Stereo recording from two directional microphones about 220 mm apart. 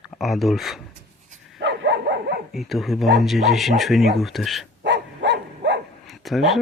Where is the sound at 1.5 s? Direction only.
50° right (ahead or behind).